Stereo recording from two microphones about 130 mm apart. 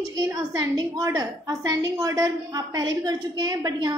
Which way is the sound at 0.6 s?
30° right (ahead or behind).